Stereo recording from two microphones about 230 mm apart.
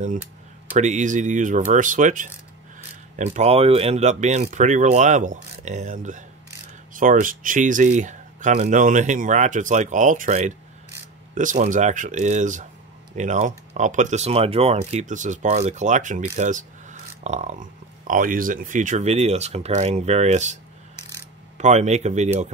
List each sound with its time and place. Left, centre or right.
0.7 s speech: right
21.5 s speech: right